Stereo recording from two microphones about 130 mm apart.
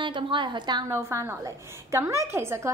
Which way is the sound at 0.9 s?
20° right (ahead or behind).